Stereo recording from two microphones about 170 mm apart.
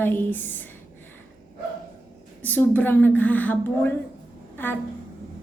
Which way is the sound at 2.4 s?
10° left (ahead or behind).